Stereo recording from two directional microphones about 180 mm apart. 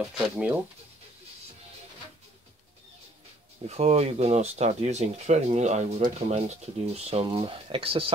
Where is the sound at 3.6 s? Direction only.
35° right (ahead or behind).